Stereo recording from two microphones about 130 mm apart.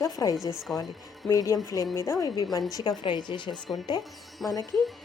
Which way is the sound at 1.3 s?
30° left (ahead or behind).